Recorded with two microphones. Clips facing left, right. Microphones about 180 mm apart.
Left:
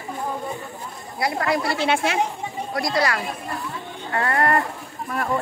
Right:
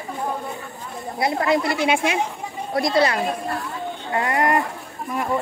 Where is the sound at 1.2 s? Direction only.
20° right (ahead or behind).